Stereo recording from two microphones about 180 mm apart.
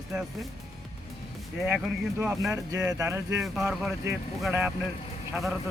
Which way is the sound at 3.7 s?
Centre (ahead or behind).